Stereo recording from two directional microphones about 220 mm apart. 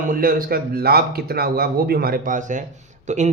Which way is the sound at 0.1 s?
40° right (ahead or behind).